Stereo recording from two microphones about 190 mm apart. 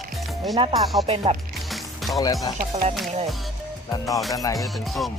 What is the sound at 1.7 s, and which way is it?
Music, centre (ahead or behind).